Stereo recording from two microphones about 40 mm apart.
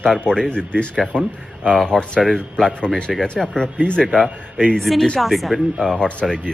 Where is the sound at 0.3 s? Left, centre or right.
Centre.